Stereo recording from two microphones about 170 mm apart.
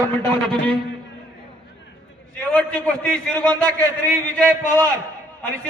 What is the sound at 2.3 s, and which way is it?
A man's voice, 10° left (ahead or behind).